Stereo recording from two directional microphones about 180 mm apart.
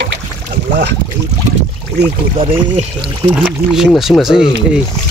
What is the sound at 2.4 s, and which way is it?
Speech, 30° right (ahead or behind).